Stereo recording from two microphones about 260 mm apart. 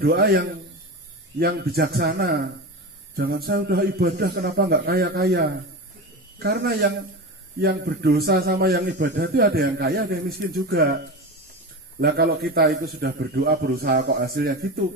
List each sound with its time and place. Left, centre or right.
0.0 s a man's voice: right
1.4 s a man's voice: right
12.0 s a man's voice: right